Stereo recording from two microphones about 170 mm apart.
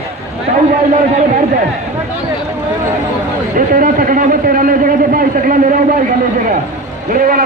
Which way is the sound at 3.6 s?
55° right (ahead or behind).